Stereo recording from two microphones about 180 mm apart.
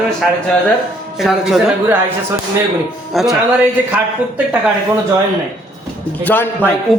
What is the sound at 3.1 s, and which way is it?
Speech, centre (ahead or behind).